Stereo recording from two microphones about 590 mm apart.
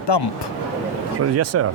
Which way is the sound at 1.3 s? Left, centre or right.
Right.